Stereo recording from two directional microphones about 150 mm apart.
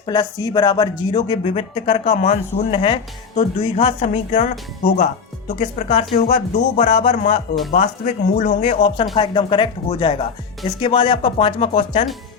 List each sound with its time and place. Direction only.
0.0 s speech: 30° left (ahead or behind)
2.0 s speech: 55° left (ahead or behind)
2.7 s speech: 35° left (ahead or behind); by 4.4 s 50° left (ahead or behind)
5.5 s speech: 55° left (ahead or behind)